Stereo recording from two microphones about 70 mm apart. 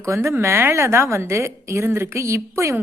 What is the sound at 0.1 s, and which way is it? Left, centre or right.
A woman's voice, right.